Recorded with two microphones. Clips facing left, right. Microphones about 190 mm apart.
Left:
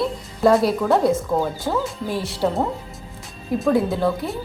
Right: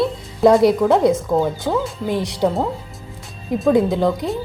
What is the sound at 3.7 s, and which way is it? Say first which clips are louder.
Speech: right 3 dB; 15° right (ahead or behind).